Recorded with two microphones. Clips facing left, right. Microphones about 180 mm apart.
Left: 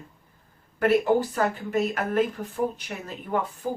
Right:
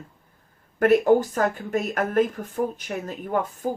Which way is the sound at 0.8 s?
45° right (ahead or behind).